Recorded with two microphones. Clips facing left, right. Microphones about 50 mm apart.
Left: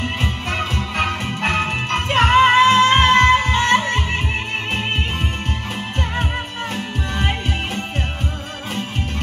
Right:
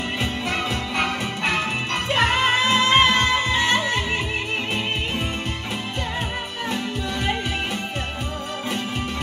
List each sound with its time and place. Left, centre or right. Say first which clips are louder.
0.2 s music: left 1 dB; left
6.7 s music: right 2 dB; left